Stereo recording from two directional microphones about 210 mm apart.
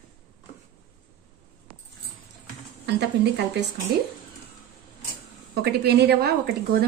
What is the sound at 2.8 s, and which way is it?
Speech, 55° right (ahead or behind).